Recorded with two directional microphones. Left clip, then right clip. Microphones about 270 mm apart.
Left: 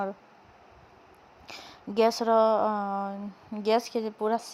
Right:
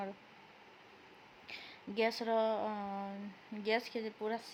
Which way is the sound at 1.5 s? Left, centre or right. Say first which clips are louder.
Left 6 dB; left.